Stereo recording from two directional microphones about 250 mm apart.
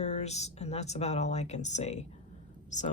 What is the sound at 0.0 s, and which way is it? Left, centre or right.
Speech, left.